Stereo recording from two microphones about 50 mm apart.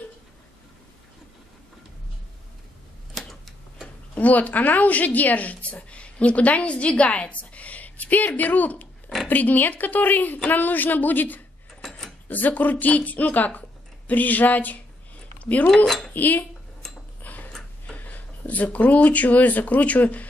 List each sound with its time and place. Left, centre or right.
3.2 s a sound: centre
4.1 s a woman's voice: left
15.7 s speech: centre
16.1 s speech: left
16.8 s a sound: centre
17.2 s dog: left
17.8 s speech: left